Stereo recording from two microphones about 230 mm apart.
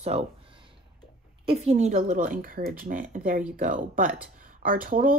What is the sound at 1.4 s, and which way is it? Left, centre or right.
Speech, right.